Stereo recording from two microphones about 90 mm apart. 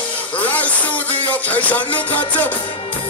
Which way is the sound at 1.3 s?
20° left (ahead or behind).